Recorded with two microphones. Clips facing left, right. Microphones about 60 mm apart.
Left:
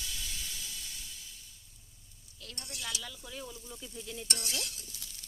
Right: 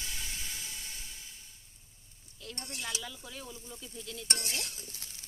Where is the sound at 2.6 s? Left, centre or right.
Right.